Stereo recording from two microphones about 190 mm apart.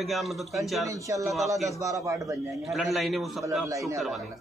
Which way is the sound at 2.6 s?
Centre (ahead or behind).